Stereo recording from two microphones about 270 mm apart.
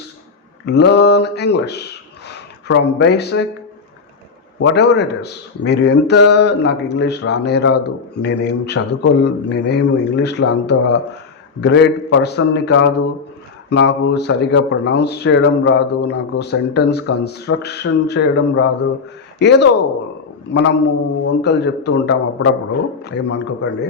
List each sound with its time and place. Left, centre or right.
0.6 s speech: left
4.6 s a man's voice: left